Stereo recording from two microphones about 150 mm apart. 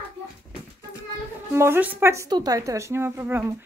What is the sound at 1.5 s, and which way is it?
Speech, 15° right (ahead or behind).